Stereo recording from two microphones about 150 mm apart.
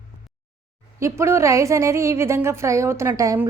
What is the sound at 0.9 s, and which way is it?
A woman's voice, 20° right (ahead or behind).